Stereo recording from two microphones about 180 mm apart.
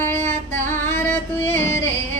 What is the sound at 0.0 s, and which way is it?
Female singing, 10° left (ahead or behind).